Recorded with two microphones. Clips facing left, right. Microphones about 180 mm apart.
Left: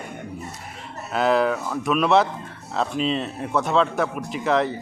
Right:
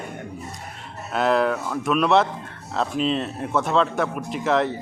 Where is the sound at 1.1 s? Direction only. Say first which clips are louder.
Even; centre (ahead or behind).